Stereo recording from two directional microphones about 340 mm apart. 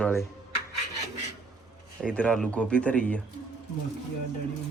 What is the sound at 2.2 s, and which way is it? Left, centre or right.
Speech, centre.